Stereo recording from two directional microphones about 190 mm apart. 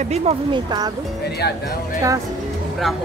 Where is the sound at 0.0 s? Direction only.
35° right (ahead or behind).